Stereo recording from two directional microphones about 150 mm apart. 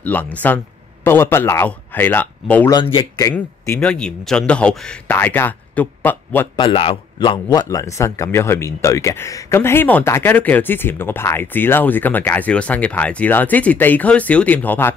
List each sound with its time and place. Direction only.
0.0 s a man's voice: 10° left (ahead or behind)
2.7 s speech: 30° left (ahead or behind)
3.3 s speech: 20° left (ahead or behind)
3.8 s a man's voice: 5° left (ahead or behind)
6.5 s a man's voice: 35° left (ahead or behind); by 15.0 s 15° left (ahead or behind)